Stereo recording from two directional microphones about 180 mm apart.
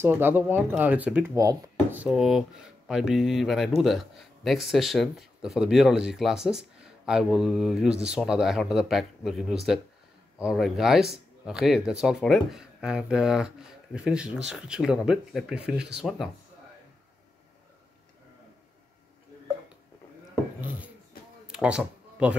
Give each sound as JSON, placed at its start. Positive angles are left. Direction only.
{"t": 0.0, "sound": "speech", "side_deg": -10}
{"t": 1.4, "sound": "speech", "side_deg": -20}
{"t": 2.0, "sound": "speech", "side_deg": 0}
{"t": 21.5, "sound": "a sound", "side_deg": -5}